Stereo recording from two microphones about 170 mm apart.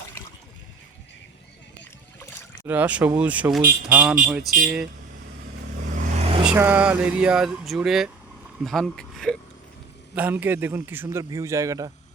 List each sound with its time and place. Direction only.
1.8 s splash: 15° left (ahead or behind)
2.6 s a man's voice: 10° right (ahead or behind)
6.1 s vehicle: 40° right (ahead or behind)
6.4 s speech: 10° right (ahead or behind)
10.2 s a man's voice: 10° right (ahead or behind)